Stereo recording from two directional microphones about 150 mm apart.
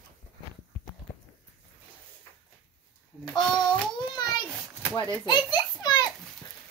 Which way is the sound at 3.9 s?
30° left (ahead or behind).